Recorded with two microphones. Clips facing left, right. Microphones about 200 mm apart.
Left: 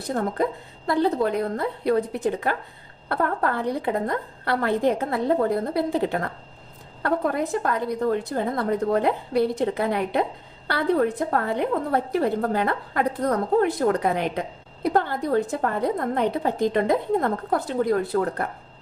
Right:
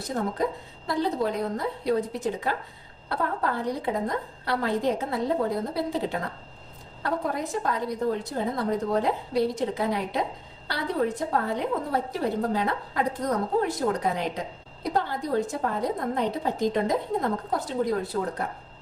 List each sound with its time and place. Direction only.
0.9 s a woman's voice: 60° left (ahead or behind)